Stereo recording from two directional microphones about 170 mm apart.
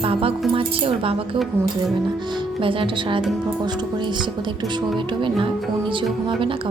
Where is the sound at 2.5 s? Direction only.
30° right (ahead or behind).